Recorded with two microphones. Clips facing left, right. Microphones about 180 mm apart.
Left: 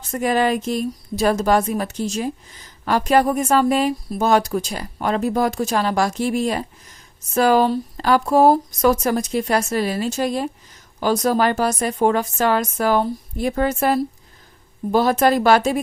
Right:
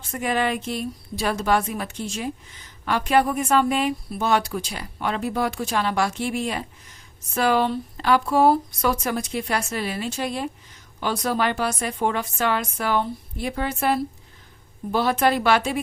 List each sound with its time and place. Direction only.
0.0 s speech: 40° left (ahead or behind)